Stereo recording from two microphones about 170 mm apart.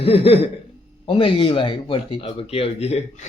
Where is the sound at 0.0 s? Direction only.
35° left (ahead or behind).